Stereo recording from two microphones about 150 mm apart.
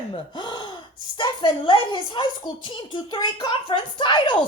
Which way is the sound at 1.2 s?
30° left (ahead or behind).